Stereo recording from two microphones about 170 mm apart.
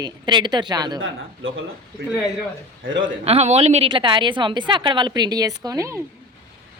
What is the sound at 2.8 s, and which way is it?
Speech, 90° right.